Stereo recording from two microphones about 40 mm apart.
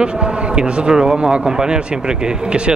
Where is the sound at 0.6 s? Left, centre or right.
Centre.